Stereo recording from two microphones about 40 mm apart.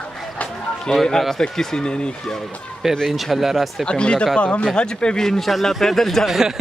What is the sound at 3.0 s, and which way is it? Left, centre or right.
Speech, centre.